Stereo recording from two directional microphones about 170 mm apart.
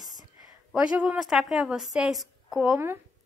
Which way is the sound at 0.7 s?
5° right (ahead or behind).